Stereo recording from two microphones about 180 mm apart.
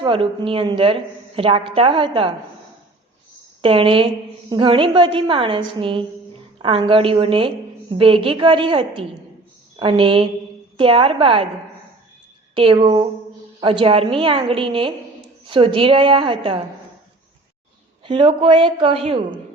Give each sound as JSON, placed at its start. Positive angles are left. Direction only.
{"t": 0.0, "sound": "a woman's voice", "side_deg": -30}
{"t": 3.6, "sound": "a woman's voice", "side_deg": -30}
{"t": 12.5, "sound": "a woman's voice", "side_deg": -30}
{"t": 18.0, "sound": "a woman's voice", "side_deg": -30}